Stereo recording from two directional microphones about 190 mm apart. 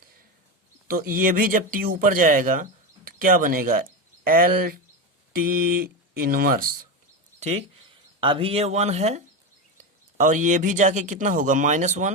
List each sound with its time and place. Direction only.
0.9 s speech: 50° right (ahead or behind)
7.3 s bird: 35° right (ahead or behind)
8.2 s speech: 30° right (ahead or behind)